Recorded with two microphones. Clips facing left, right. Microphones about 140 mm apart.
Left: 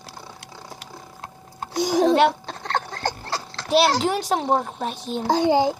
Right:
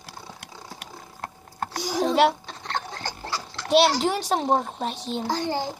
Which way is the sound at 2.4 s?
55° left (ahead or behind).